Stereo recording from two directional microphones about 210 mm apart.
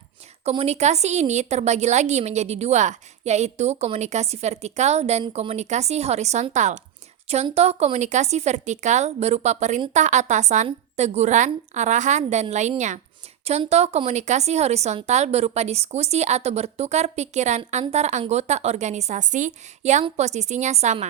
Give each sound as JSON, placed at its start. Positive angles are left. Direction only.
{"t": 0.4, "sound": "a woman's voice", "side_deg": -30}